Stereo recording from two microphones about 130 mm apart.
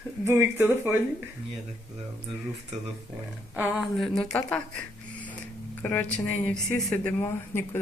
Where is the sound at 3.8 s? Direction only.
5° left (ahead or behind).